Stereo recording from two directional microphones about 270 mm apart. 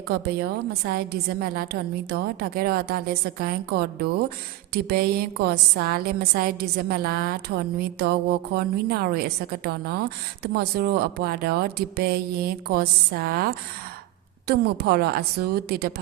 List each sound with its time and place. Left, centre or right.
0.1 s a woman's voice: right